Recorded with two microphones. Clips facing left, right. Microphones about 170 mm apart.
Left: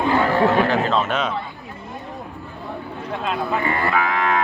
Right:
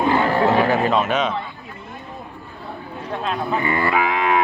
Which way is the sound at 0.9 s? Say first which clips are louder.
Right 2 dB; 10° right (ahead or behind).